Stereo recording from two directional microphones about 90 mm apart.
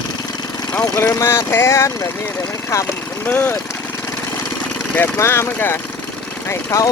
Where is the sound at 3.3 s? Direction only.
20° left (ahead or behind).